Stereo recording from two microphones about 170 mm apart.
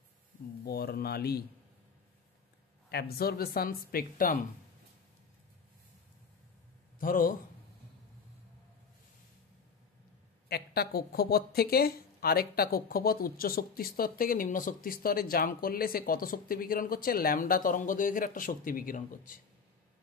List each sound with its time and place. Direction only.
0.7 s speech: 65° left (ahead or behind)
2.9 s speech: 70° left (ahead or behind)
7.0 s a man's voice: 55° left (ahead or behind)
10.5 s speech: 65° left (ahead or behind)